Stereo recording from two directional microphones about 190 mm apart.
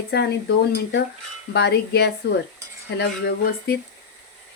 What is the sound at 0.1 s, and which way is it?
Speech, 60° left (ahead or behind).